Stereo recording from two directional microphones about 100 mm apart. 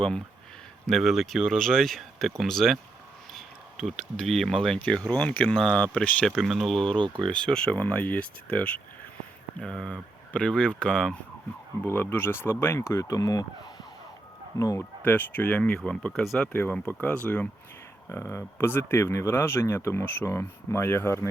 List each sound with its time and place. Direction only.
0.9 s speech: centre (ahead or behind)
7.0 s speech: 55° right (ahead or behind)
7.3 s speech: 10° left (ahead or behind)
11.9 s speech: 25° left (ahead or behind)
14.8 s speech: 20° left (ahead or behind); by 16.5 s centre (ahead or behind)
16.5 s speech: 20° left (ahead or behind)